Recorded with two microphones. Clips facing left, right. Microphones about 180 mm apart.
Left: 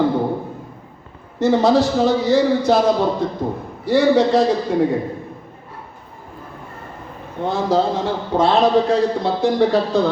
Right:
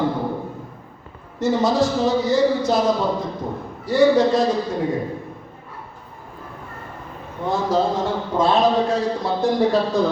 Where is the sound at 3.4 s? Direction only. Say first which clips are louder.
Left 5 dB; 65° left (ahead or behind).